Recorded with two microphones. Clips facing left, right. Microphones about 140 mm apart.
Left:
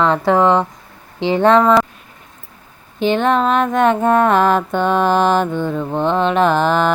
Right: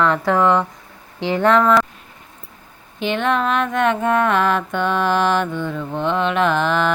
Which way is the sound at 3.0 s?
35° left (ahead or behind).